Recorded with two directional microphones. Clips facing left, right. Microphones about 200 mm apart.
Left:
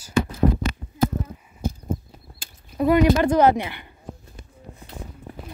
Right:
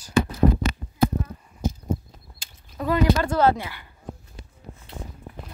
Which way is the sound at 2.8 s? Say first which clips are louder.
Left 4 dB; 15° left (ahead or behind).